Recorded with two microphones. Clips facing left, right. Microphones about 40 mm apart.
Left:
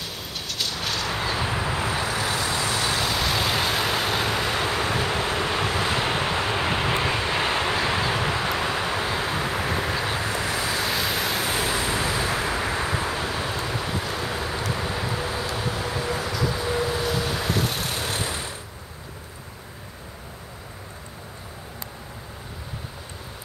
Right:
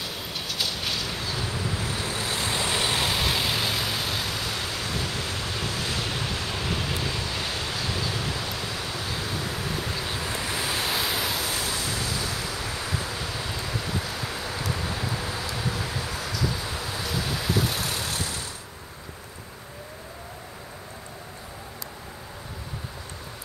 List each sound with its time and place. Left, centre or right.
0.3 s vehicle: centre
1.1 s vehicle: left
2.5 s vehicle: right
3.2 s vehicle: centre
3.5 s vehicle: centre; by 6.0 s left
6.0 s vehicle: left
10.5 s waves: left
10.9 s vehicle: centre
11.3 s vehicle: left
14.1 s a sound: left
14.7 s vehicle: left
17.5 s vehicle: centre
18.1 s a sound: left